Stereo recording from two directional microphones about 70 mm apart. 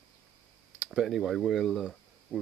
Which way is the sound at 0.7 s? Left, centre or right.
Centre.